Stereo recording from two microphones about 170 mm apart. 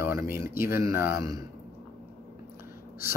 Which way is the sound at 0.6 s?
15° right (ahead or behind).